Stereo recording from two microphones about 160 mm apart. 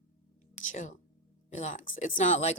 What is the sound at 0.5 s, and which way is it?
A woman's voice, 50° left (ahead or behind).